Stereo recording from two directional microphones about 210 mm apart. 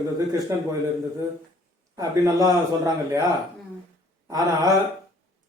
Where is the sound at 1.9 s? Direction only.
15° right (ahead or behind).